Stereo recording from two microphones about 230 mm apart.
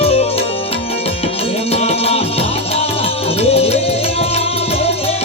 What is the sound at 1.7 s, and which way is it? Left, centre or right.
Music, left.